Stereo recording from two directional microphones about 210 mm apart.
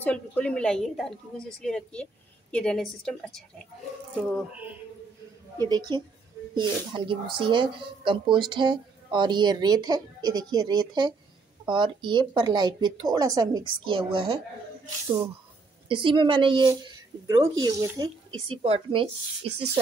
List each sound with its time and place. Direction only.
0.0 s a woman's voice: 5° left (ahead or behind)
5.6 s a woman's voice: 20° right (ahead or behind)
15.9 s a woman's voice: 25° right (ahead or behind)